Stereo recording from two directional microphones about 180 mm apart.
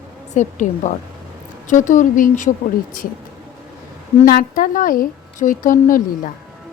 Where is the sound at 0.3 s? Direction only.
40° left (ahead or behind).